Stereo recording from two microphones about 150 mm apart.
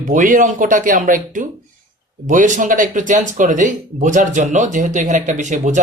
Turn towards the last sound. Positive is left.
turn(degrees=-55)  # may be behind; listen again after turning